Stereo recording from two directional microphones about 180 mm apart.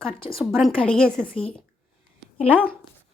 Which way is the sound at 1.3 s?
30° left (ahead or behind).